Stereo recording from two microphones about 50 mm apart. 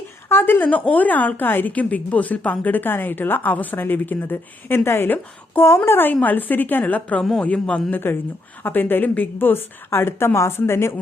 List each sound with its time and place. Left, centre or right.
0.3 s speech: left
1.7 s speech: left
5.6 s speech: left
6.2 s a man's voice: left
7.9 s a woman's voice: left